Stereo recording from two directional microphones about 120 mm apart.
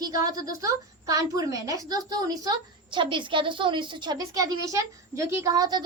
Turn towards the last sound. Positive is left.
turn(degrees=-35)  # may be behind; listen again after turning